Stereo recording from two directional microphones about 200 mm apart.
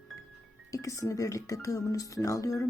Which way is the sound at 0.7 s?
15° left (ahead or behind).